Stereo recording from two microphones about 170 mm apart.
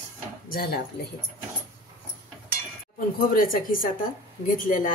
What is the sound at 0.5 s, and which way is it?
Speech, 60° left (ahead or behind).